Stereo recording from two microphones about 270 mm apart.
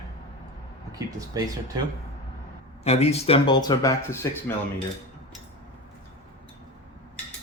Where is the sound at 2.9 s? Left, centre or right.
Left.